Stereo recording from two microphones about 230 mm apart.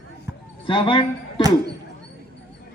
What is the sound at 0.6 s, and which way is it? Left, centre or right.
Speech, left.